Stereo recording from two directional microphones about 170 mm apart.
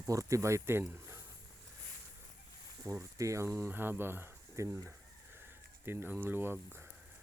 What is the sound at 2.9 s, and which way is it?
Speech, 20° right (ahead or behind).